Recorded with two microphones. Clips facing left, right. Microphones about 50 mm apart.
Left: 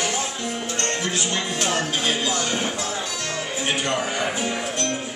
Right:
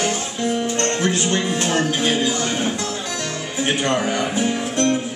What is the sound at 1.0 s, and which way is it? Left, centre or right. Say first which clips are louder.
Speech: right 5 dB; right.